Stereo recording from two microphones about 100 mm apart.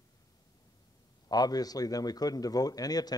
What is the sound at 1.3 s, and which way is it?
A man's voice, 40° left (ahead or behind).